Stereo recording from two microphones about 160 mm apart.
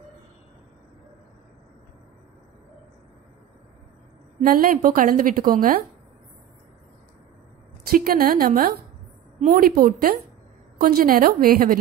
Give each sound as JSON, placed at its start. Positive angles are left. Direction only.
{"t": 4.4, "sound": "a woman's voice", "side_deg": -60}
{"t": 7.9, "sound": "a woman's voice", "side_deg": -65}